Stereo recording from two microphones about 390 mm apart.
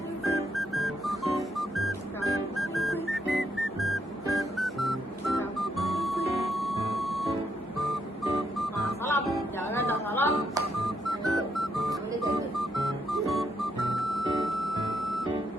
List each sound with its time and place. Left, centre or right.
0.3 s music: centre
10.3 s music: centre